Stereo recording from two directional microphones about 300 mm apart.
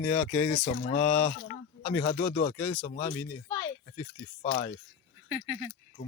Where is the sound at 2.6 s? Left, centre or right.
Centre.